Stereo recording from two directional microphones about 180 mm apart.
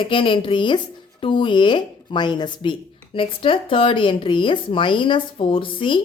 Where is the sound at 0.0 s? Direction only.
30° left (ahead or behind).